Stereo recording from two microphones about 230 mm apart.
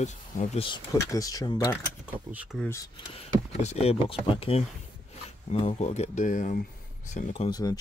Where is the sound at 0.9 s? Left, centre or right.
Centre.